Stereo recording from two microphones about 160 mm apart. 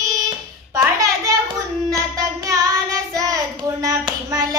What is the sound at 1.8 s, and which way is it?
Child singing, 20° right (ahead or behind).